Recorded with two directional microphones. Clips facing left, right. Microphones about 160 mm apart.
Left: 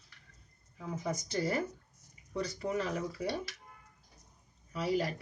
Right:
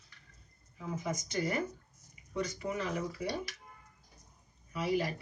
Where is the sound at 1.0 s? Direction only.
35° left (ahead or behind).